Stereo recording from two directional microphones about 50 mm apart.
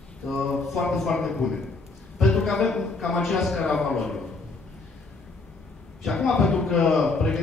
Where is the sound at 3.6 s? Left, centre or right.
Centre.